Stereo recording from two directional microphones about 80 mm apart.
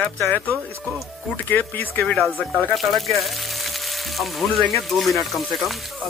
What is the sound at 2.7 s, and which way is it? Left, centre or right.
Speech, centre.